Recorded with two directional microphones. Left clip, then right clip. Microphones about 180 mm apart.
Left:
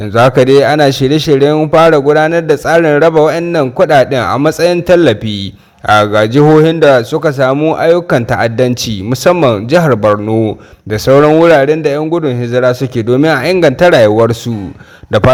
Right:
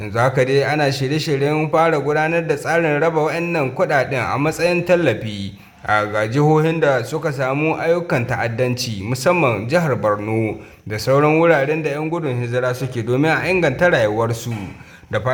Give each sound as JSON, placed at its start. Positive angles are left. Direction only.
{"t": 0.1, "sound": "a man's voice", "side_deg": 45}
{"t": 10.9, "sound": "a man's voice", "side_deg": 45}